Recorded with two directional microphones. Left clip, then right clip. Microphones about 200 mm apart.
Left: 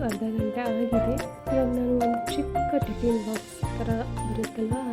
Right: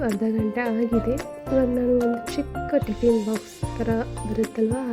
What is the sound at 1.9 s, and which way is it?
Speech, centre (ahead or behind).